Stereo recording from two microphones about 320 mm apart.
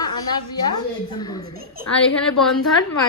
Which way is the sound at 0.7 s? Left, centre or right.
Centre.